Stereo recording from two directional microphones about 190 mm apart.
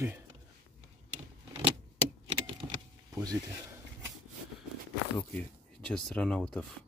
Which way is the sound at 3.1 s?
20° right (ahead or behind).